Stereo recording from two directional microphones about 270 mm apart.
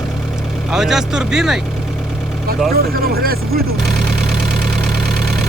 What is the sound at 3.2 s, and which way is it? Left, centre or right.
Speech, right.